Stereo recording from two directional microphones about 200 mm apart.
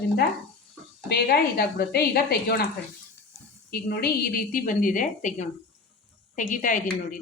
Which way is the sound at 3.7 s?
50° left (ahead or behind).